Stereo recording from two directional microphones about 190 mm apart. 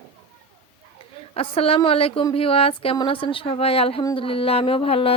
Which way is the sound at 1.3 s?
30° left (ahead or behind).